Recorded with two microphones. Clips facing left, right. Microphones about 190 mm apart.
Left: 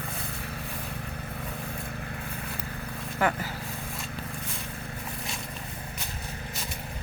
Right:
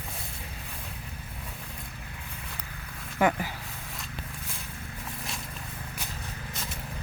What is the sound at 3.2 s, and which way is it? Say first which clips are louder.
Speech: right 2 dB; 15° right (ahead or behind).